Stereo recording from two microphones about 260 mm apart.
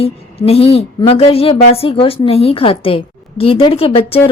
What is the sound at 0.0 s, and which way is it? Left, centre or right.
A woman's voice, left.